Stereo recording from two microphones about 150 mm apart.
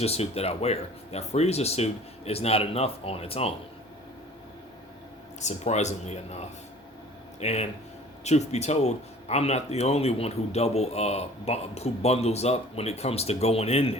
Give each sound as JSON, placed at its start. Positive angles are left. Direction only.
{"t": 0.0, "sound": "speech", "side_deg": 45}
{"t": 5.4, "sound": "speech", "side_deg": 50}
{"t": 7.3, "sound": "speech", "side_deg": 45}